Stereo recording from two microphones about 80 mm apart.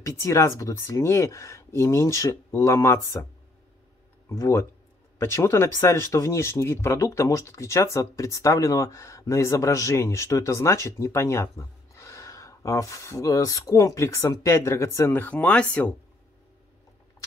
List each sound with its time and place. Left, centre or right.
0.0 s speech: left
4.3 s speech: left
15.1 s speech: centre